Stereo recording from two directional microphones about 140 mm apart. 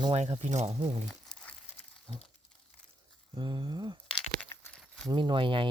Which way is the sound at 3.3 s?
35° right (ahead or behind).